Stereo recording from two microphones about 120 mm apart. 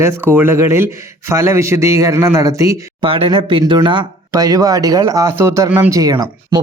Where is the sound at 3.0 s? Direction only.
50° right (ahead or behind).